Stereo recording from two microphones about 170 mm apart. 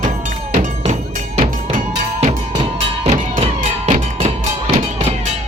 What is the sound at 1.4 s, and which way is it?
Music, 45° right (ahead or behind).